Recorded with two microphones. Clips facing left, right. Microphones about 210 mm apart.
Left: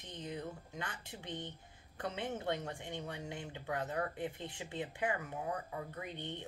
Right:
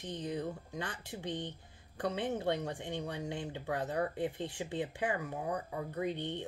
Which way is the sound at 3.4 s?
30° right (ahead or behind).